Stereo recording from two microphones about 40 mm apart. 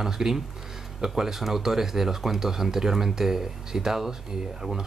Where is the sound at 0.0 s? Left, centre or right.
Centre.